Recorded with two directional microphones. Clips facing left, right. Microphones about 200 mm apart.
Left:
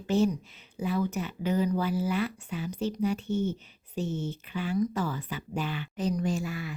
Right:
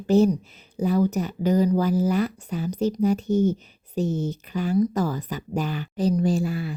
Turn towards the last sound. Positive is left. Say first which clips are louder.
# right 7 dB
turn(degrees=-35)  # may be behind; listen again after turning